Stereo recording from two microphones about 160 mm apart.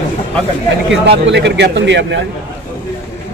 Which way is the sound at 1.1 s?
90° right.